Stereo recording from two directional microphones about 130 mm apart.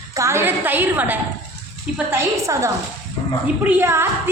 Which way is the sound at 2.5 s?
25° right (ahead or behind).